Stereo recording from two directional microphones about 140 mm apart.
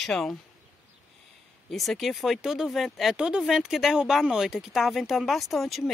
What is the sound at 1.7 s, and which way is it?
Speech, centre (ahead or behind).